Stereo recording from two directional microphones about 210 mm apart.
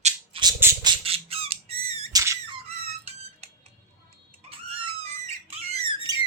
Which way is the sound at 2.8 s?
30° right (ahead or behind).